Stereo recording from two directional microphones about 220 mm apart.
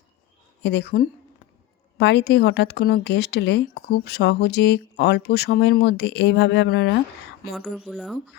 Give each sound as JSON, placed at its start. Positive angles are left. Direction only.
{"t": 0.6, "sound": "a woman's voice", "side_deg": 50}
{"t": 7.5, "sound": "speech", "side_deg": 0}